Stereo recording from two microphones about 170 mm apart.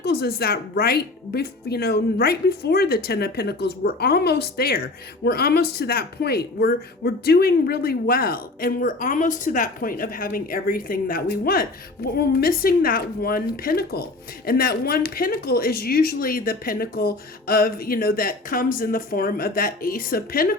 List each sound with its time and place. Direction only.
0.0 s speech: 70° left (ahead or behind)